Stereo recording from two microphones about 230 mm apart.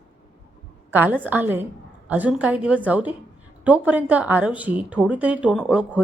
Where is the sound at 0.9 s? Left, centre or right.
Centre.